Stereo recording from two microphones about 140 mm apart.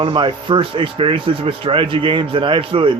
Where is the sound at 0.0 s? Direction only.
35° right (ahead or behind).